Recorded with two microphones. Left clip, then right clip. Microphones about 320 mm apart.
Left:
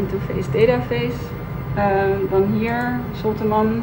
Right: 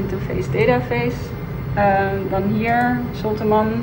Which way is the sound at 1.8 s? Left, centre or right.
Centre.